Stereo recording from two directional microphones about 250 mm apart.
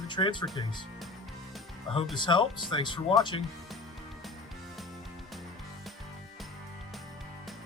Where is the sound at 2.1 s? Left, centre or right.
Centre.